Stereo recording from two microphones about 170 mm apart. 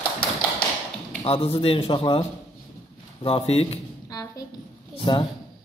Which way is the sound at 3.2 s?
35° left (ahead or behind).